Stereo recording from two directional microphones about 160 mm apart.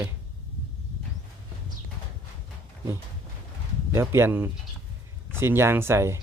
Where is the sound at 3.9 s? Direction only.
15° right (ahead or behind).